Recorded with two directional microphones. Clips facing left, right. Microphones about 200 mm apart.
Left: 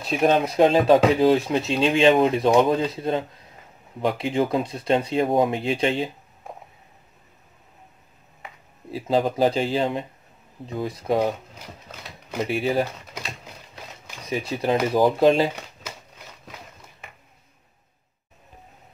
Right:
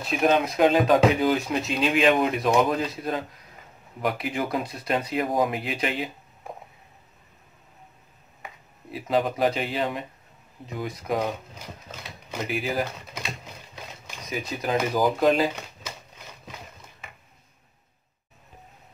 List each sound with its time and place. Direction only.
0.0 s speech: 30° left (ahead or behind)
8.9 s speech: 30° left (ahead or behind)
12.4 s speech: 30° left (ahead or behind)
14.2 s speech: 30° left (ahead or behind)